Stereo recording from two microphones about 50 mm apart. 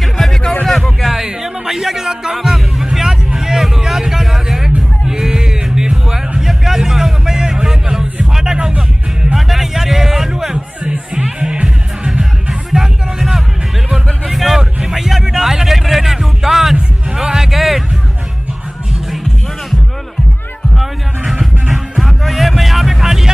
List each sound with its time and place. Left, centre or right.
0.0 s music: centre
1.0 s music: centre
9.3 s music: centre
20.7 s music: centre